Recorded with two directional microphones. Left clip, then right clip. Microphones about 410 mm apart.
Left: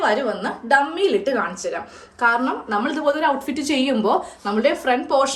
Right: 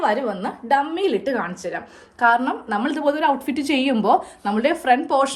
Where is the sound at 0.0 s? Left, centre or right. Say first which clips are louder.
Left 1 dB; centre.